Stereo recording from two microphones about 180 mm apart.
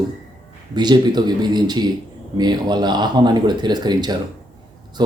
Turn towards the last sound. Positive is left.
turn(degrees=-25)  # may be behind; listen again after turning